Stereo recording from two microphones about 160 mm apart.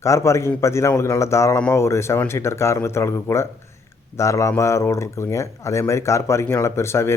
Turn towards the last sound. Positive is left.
turn(degrees=15)  # may be behind; listen again after turning